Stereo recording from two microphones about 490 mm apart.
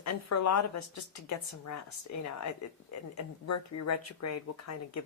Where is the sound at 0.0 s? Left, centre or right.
Left.